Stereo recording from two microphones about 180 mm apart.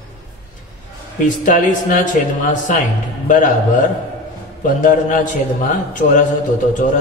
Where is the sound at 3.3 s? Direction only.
45° left (ahead or behind).